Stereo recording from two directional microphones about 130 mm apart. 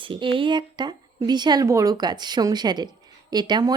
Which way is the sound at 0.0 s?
40° right (ahead or behind).